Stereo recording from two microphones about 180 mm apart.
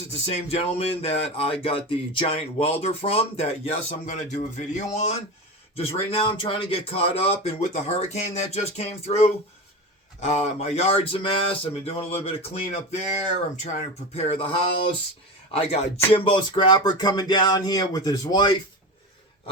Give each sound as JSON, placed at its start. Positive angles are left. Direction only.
{"t": 0.3, "sound": "speech", "side_deg": 35}